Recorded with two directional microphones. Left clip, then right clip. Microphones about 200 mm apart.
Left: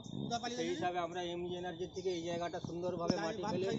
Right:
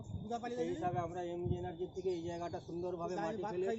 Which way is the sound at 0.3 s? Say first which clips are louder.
Even; 50° right (ahead or behind).